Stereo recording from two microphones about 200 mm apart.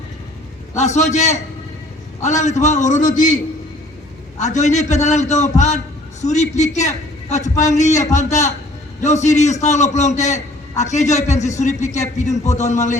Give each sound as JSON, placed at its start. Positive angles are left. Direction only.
{"t": 0.8, "sound": "a man's voice", "side_deg": 35}
{"t": 4.4, "sound": "a man's voice", "side_deg": 35}